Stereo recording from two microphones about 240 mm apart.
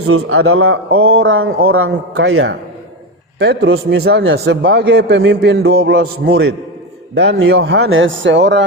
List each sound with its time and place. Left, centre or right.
0.0 s a man's voice: right